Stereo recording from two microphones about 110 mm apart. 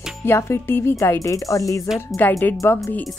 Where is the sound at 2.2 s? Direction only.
20° left (ahead or behind).